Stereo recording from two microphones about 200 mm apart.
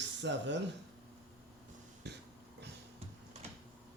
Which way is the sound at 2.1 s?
55° right (ahead or behind).